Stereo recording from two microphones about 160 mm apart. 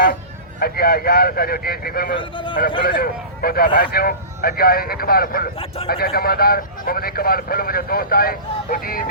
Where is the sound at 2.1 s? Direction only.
30° left (ahead or behind).